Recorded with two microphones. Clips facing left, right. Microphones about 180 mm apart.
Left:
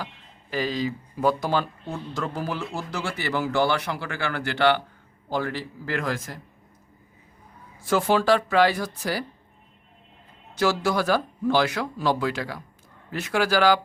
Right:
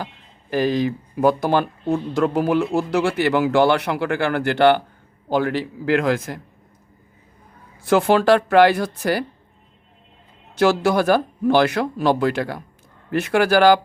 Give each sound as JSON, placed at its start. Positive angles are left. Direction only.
{"t": 0.5, "sound": "speech", "side_deg": -55}
{"t": 5.3, "sound": "speech", "side_deg": -65}
{"t": 7.9, "sound": "speech", "side_deg": -65}
{"t": 10.5, "sound": "speech", "side_deg": -60}